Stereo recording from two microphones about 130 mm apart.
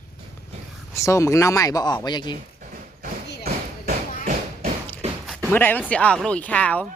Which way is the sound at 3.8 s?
90° right.